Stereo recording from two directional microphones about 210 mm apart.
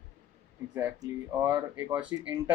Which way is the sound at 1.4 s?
10° right (ahead or behind).